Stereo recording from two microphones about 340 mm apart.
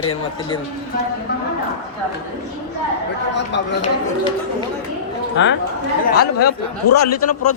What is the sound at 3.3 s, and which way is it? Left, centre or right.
Speech, left.